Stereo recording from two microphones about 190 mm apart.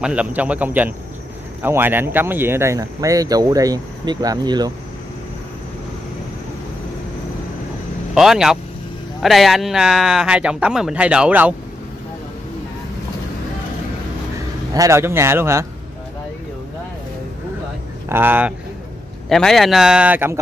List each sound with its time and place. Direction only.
0.0 s speech: 5° right (ahead or behind)
8.1 s a man's voice: centre (ahead or behind)
14.7 s speech: 15° right (ahead or behind)
18.0 s speech: 10° right (ahead or behind)
19.2 s a man's voice: centre (ahead or behind)